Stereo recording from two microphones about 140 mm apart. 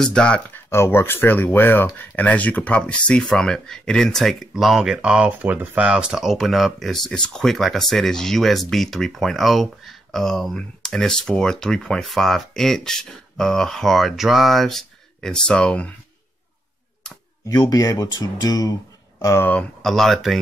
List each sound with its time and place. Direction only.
0.0 s speech: 5° left (ahead or behind)
0.7 s speech: 20° left (ahead or behind)
17.5 s speech: 25° left (ahead or behind); by 20.3 s centre (ahead or behind)